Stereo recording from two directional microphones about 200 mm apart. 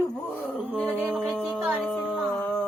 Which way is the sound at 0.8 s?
10° right (ahead or behind).